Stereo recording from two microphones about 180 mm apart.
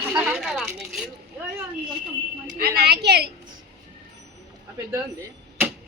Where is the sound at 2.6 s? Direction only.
60° right (ahead or behind).